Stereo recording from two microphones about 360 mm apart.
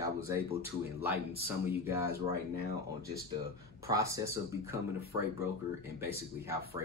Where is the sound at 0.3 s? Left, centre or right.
Centre.